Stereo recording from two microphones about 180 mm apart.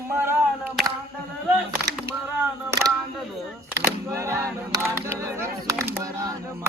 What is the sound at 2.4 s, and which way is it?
Single-lens reflex camera, 15° right (ahead or behind).